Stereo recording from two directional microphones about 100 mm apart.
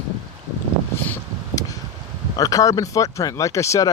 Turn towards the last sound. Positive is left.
turn(degrees=30)  # may be behind; listen again after turning